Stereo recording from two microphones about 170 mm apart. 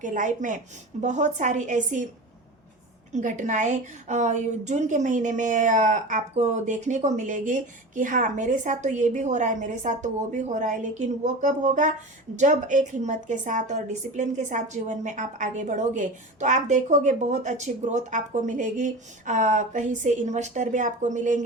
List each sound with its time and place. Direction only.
0.0 s a woman's voice: 50° right (ahead or behind)
3.1 s a woman's voice: 45° right (ahead or behind)